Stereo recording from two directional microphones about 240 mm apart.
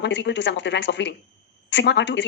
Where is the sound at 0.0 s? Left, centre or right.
Left.